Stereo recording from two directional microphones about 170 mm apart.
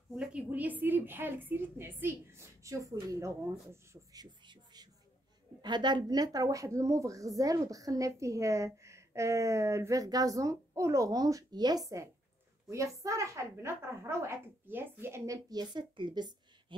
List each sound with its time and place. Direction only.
0.1 s a woman's voice: 5° right (ahead or behind); by 16.7 s 25° right (ahead or behind)